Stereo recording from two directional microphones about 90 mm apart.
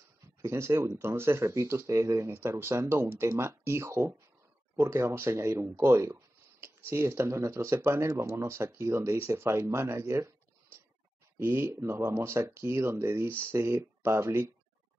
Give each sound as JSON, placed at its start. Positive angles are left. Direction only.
{"t": 0.4, "sound": "speech", "side_deg": -30}
{"t": 11.3, "sound": "speech", "side_deg": -25}